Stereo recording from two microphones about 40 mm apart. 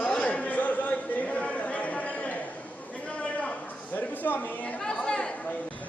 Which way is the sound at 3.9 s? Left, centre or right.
Left.